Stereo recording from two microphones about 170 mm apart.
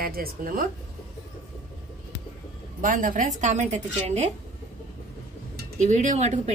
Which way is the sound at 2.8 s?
50° right (ahead or behind).